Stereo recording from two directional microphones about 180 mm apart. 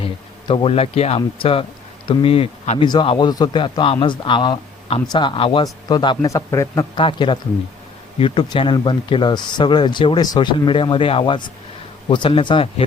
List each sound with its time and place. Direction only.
0.0 s speech: 30° left (ahead or behind)